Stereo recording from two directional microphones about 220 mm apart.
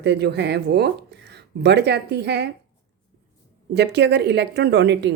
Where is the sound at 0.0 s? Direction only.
50° right (ahead or behind).